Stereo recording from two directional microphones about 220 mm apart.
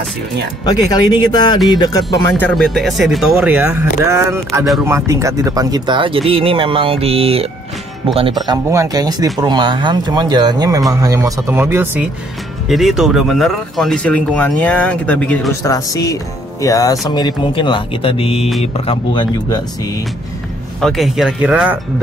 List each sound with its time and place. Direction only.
0.7 s speech: 20° left (ahead or behind)
2.3 s speech: 5° left (ahead or behind); by 19.6 s 20° left (ahead or behind)
20.8 s speech: centre (ahead or behind)